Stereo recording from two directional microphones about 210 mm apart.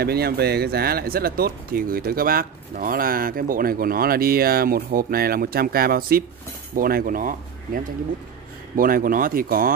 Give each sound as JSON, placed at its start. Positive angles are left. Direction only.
{"t": 0.0, "sound": "speech", "side_deg": -50}